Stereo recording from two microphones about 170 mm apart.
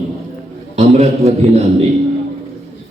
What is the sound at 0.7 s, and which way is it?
Speech, 40° right (ahead or behind).